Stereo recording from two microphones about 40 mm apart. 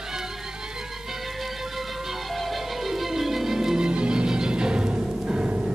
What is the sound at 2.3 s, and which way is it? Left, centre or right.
Music, centre.